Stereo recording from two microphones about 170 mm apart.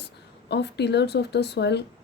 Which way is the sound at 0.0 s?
85° left.